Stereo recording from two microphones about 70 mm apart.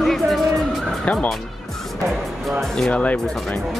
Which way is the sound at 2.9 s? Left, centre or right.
Left.